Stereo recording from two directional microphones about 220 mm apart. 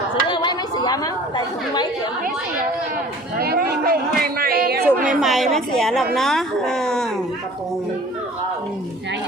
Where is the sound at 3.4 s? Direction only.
45° right (ahead or behind).